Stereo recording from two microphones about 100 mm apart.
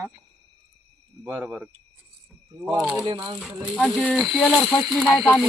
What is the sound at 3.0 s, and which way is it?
Speech, 55° right (ahead or behind).